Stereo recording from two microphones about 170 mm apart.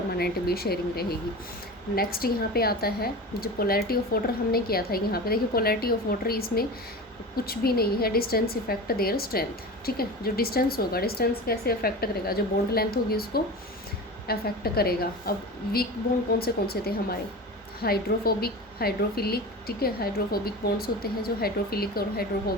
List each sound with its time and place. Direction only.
0.2 s a woman's voice: 65° left (ahead or behind)